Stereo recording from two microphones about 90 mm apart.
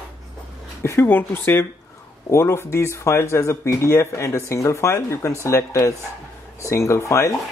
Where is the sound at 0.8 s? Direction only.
25° left (ahead or behind).